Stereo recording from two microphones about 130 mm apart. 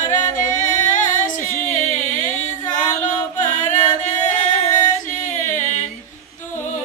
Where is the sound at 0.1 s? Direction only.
75° left (ahead or behind).